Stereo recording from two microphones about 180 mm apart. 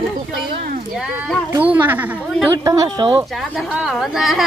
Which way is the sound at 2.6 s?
20° right (ahead or behind).